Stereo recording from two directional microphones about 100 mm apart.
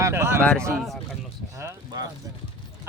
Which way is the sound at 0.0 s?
25° right (ahead or behind).